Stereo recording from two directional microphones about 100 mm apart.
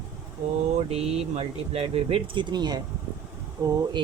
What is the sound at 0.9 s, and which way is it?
Speech, 90° right.